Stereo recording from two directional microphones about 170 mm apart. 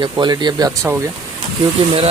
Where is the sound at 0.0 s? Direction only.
25° right (ahead or behind).